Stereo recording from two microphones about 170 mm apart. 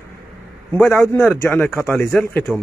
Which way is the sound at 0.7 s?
Centre (ahead or behind).